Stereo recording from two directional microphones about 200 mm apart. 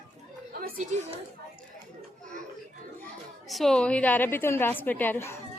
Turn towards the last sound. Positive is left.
turn(degrees=10)  # may be behind; listen again after turning